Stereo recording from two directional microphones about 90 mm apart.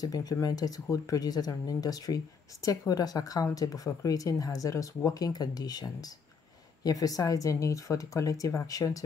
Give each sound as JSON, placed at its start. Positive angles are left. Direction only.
{"t": 0.0, "sound": "speech", "side_deg": 45}